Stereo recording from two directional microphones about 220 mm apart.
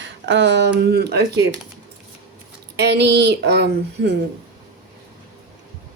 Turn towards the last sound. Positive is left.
turn(degrees=-50)  # may be behind; listen again after turning